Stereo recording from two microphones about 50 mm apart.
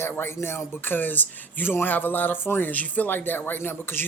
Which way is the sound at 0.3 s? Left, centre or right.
Left.